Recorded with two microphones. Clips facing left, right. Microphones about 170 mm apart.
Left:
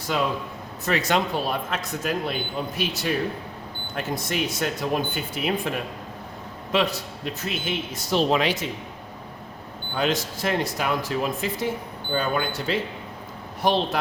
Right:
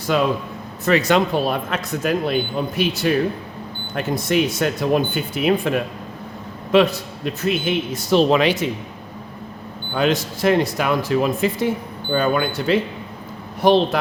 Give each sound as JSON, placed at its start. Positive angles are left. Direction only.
{"t": 0.9, "sound": "speech", "side_deg": -75}
{"t": 6.7, "sound": "a man's voice", "side_deg": -60}
{"t": 9.9, "sound": "speech", "side_deg": -70}